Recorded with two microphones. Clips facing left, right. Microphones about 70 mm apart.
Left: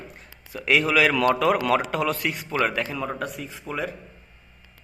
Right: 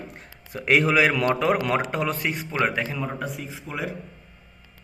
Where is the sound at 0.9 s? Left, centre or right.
Right.